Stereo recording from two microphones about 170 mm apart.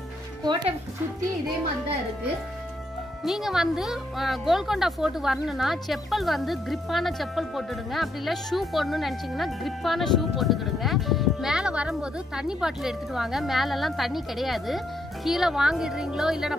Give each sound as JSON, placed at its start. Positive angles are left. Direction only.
{"t": 0.4, "sound": "speech", "side_deg": -25}
{"t": 3.3, "sound": "a woman's voice", "side_deg": 0}